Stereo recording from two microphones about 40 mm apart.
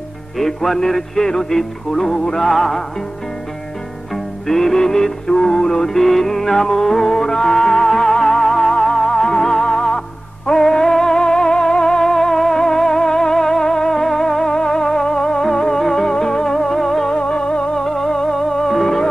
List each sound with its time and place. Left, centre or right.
0.4 s music: centre
4.1 s music: centre
17.2 s music: left; by 18.9 s centre